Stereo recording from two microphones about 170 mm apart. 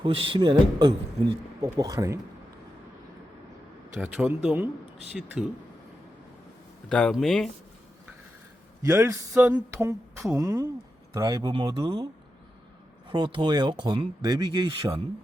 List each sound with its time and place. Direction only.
0.0 s speech: 30° right (ahead or behind)
3.9 s speech: 10° right (ahead or behind)
6.8 s speech: 5° left (ahead or behind)
8.9 s speech: 15° right (ahead or behind)
13.1 s speech: 30° right (ahead or behind)